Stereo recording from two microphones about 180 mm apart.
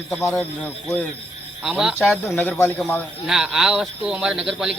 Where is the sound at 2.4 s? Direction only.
10° left (ahead or behind).